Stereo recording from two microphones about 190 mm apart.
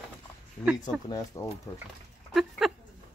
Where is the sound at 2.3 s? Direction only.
Centre (ahead or behind).